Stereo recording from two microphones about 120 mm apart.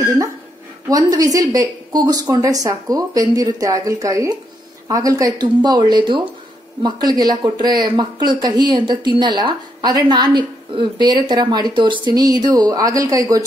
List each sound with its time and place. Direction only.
0.8 s speech: 30° right (ahead or behind)